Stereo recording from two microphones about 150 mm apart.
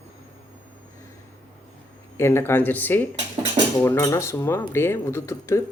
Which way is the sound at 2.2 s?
15° left (ahead or behind).